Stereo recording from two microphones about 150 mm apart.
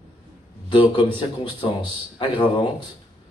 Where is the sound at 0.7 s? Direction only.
35° left (ahead or behind).